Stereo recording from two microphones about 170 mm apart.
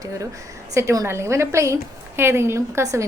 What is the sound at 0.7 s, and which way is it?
A woman's voice, 15° right (ahead or behind).